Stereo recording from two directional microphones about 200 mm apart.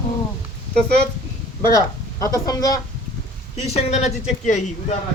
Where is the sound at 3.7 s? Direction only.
35° left (ahead or behind).